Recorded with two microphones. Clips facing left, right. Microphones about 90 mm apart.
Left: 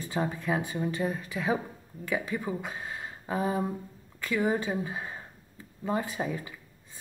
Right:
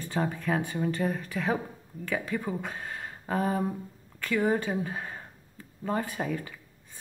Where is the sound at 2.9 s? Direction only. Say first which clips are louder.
Right 2 dB; 10° left (ahead or behind).